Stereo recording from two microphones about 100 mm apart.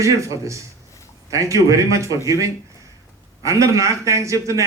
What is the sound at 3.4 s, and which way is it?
A man's voice, 30° right (ahead or behind).